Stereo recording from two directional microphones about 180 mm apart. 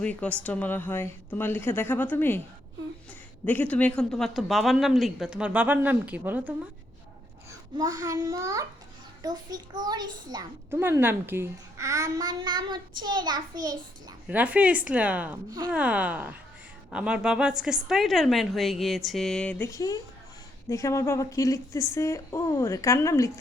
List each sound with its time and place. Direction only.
0.0 s speech: 5° left (ahead or behind)
3.4 s speech: 10° left (ahead or behind); by 6.5 s 10° right (ahead or behind)
7.8 s a child's voice: 20° right (ahead or behind)
14.3 s a woman's voice: 10° right (ahead or behind); by 23.3 s 15° left (ahead or behind)